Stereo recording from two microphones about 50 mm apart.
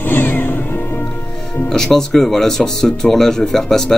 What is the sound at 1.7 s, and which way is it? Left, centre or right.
Speech, centre.